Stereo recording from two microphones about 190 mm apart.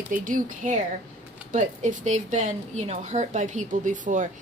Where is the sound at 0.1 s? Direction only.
45° right (ahead or behind).